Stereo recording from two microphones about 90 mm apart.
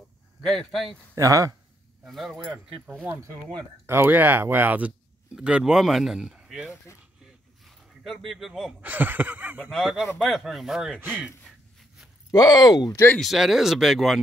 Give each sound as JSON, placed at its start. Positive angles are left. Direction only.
{"t": 0.4, "sound": "speech", "side_deg": 5}
{"t": 1.1, "sound": "speech", "side_deg": -40}
{"t": 2.0, "sound": "speech", "side_deg": 0}
{"t": 3.8, "sound": "speech", "side_deg": -25}
{"t": 7.6, "sound": "a sound", "side_deg": 0}
{"t": 8.8, "sound": "a sound", "side_deg": -20}
{"t": 9.6, "sound": "speech", "side_deg": 5}
{"t": 11.0, "sound": "speech", "side_deg": -15}
{"t": 12.3, "sound": "speech", "side_deg": 40}
{"t": 12.9, "sound": "speech", "side_deg": 25}
{"t": 13.2, "sound": "speech", "side_deg": -5}